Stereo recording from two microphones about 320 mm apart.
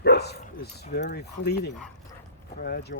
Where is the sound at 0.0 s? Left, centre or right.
Left.